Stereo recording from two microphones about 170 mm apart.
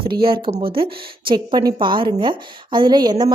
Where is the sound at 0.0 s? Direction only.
30° right (ahead or behind).